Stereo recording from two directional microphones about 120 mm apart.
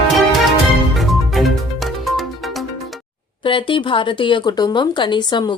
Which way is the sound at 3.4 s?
45° left (ahead or behind).